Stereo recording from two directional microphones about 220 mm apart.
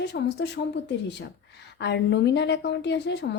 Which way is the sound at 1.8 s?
50° left (ahead or behind).